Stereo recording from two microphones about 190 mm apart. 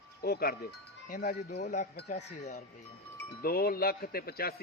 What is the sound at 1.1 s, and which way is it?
A man's voice, 45° left (ahead or behind).